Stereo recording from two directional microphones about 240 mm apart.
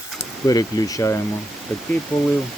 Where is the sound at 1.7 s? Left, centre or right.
Centre.